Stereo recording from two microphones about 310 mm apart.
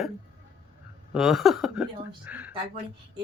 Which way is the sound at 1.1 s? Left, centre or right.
Centre.